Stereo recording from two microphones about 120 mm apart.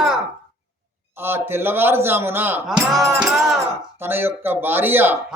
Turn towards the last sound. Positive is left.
turn(degrees=-15)  # may be behind; listen again after turning